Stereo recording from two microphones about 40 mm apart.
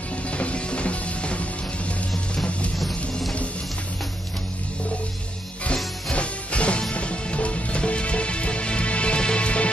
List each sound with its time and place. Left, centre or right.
0.3 s music: left
6.1 s music: left